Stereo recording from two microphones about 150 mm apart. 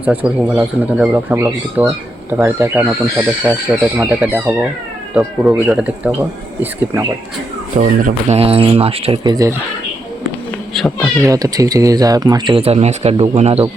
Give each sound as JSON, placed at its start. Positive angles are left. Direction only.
{"t": 0.3, "sound": "speech", "side_deg": -10}
{"t": 1.3, "sound": "speech", "side_deg": -15}
{"t": 7.8, "sound": "speech", "side_deg": -50}
{"t": 9.3, "sound": "speech", "side_deg": -20}
{"t": 10.8, "sound": "speech", "side_deg": 5}
{"t": 11.2, "sound": "speech", "side_deg": -20}